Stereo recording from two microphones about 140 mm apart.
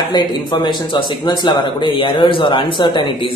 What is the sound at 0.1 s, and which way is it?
A man's voice, 30° left (ahead or behind).